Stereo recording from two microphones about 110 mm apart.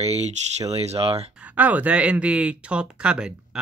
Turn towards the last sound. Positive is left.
turn(degrees=-5)  # may be behind; listen again after turning